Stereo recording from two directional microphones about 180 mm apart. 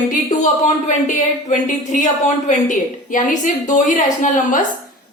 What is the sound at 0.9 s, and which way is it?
A woman's voice, 45° left (ahead or behind).